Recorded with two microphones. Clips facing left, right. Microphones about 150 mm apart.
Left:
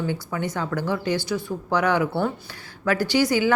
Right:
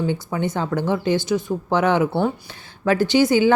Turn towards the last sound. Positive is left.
turn(degrees=-25)  # may be behind; listen again after turning